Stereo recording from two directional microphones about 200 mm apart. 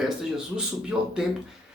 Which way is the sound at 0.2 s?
5° right (ahead or behind).